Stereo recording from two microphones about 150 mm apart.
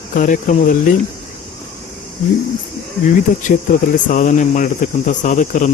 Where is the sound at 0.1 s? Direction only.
60° left (ahead or behind).